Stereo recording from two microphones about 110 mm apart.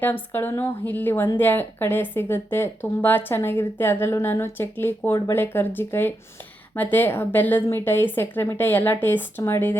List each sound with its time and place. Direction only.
0.0 s a woman's voice: 20° left (ahead or behind)